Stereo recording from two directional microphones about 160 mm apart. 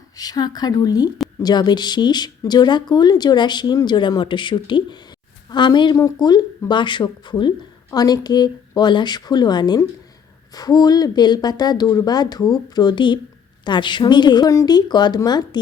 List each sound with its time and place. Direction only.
0.2 s speech: 25° left (ahead or behind)